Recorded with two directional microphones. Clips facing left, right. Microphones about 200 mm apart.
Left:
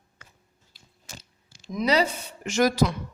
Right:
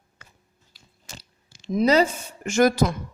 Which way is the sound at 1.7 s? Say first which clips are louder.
Right 5 dB; 45° right (ahead or behind).